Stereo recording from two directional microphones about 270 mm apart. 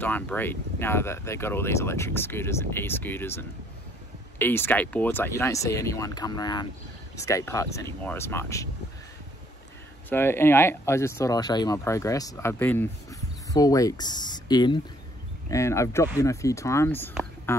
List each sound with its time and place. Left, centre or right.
0.0 s speech: centre
10.0 s speech: centre